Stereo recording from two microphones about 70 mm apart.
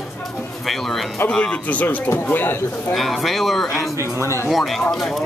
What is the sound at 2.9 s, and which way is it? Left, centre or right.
Speech, centre.